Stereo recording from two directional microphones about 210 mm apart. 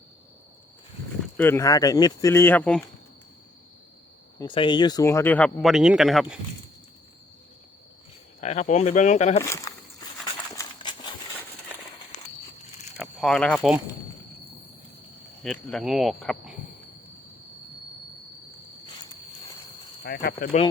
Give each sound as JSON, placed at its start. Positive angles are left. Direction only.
{"t": 1.4, "sound": "speech", "side_deg": 10}
{"t": 4.4, "sound": "speech", "side_deg": 25}
{"t": 8.4, "sound": "speech", "side_deg": 35}
{"t": 9.4, "sound": "walk", "side_deg": 15}
{"t": 10.5, "sound": "a sound", "side_deg": 20}
{"t": 13.0, "sound": "speech", "side_deg": 0}
{"t": 15.4, "sound": "speech", "side_deg": 5}
{"t": 20.1, "sound": "speech", "side_deg": 50}